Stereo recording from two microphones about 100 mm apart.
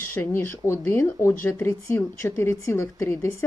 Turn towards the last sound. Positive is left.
turn(degrees=30)  # may be behind; listen again after turning